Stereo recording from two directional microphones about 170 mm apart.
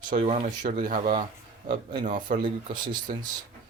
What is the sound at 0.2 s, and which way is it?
Speech, 40° right (ahead or behind).